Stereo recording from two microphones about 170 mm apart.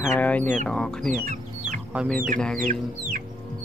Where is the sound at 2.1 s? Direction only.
55° right (ahead or behind).